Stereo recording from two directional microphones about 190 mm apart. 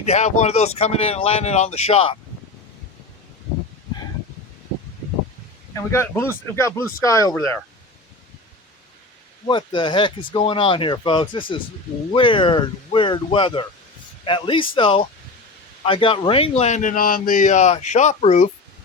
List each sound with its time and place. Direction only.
0.0 s a man's voice: 35° left (ahead or behind)
5.7 s speech: 15° left (ahead or behind)
9.5 s a man's voice: 25° left (ahead or behind)